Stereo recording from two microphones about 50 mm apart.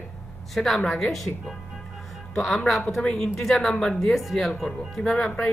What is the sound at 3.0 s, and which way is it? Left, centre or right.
Speech, centre.